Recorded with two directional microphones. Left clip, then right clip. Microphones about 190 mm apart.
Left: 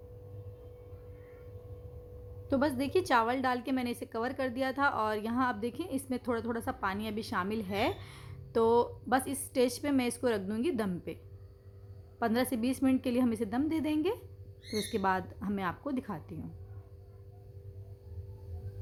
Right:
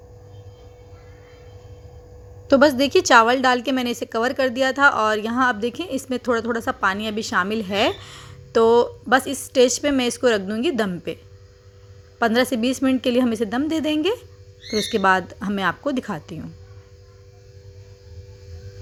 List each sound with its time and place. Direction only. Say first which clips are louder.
2.5 s a woman's voice: right 15 dB; 30° right (ahead or behind)
12.2 s a woman's voice: right 12 dB; 20° right (ahead or behind)